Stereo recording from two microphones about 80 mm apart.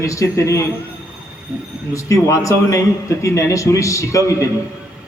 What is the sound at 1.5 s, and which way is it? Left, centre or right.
Speech, centre.